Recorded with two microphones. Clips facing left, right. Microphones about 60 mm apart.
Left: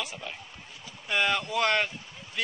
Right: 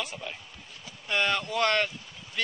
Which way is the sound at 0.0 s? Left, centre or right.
Centre.